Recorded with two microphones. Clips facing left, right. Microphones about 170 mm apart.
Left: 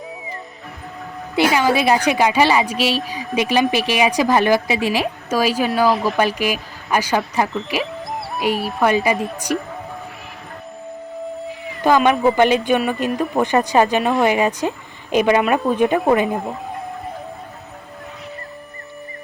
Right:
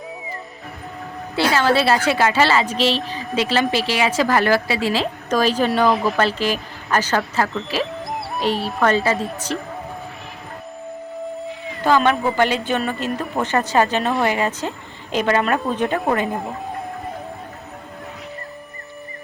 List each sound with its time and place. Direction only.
1.4 s a woman's voice: 15° left (ahead or behind)
6.1 s a woman's voice: 15° left (ahead or behind)
11.8 s a woman's voice: 15° left (ahead or behind)